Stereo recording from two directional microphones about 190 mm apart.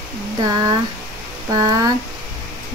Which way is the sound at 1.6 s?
20° right (ahead or behind).